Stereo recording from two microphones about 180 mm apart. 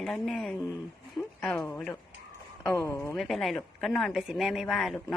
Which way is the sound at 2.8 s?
15° left (ahead or behind).